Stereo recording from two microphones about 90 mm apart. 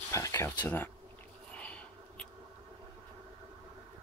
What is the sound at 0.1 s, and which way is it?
Speech, 35° left (ahead or behind).